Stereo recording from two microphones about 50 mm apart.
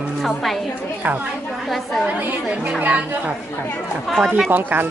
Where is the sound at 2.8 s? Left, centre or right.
Right.